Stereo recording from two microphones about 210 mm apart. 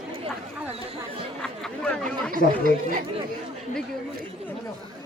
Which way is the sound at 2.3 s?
40° right (ahead or behind).